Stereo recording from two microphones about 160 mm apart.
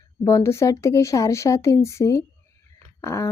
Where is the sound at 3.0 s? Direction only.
15° left (ahead or behind).